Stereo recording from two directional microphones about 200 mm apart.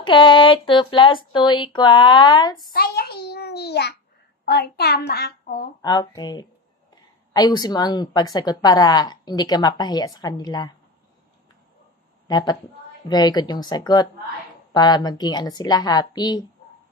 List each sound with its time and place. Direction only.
0.0 s a woman's voice: 25° left (ahead or behind)
2.7 s a child's voice: 50° left (ahead or behind)
5.8 s a woman's voice: 20° left (ahead or behind)
12.3 s a woman's voice: 20° left (ahead or behind)